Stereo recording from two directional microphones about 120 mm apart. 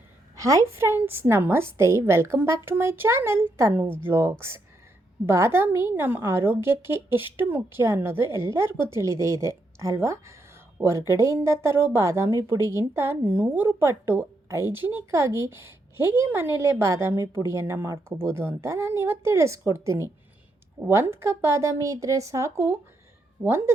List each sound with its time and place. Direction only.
0.3 s a woman's voice: 25° right (ahead or behind)